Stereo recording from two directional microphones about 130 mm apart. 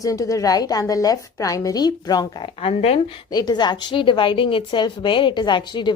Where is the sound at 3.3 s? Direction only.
30° left (ahead or behind).